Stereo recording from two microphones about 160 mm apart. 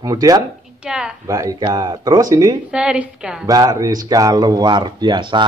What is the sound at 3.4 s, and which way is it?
A man's voice, 25° right (ahead or behind).